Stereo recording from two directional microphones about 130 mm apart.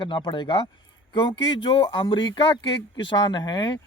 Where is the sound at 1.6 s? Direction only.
35° left (ahead or behind).